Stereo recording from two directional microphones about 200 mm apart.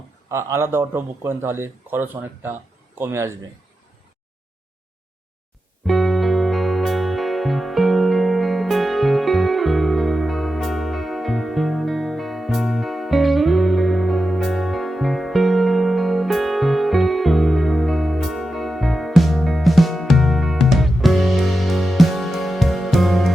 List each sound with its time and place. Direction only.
0.3 s a man's voice: 15° right (ahead or behind)
5.8 s music: centre (ahead or behind)